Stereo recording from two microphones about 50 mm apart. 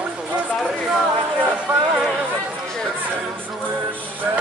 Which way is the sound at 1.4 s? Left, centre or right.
Right.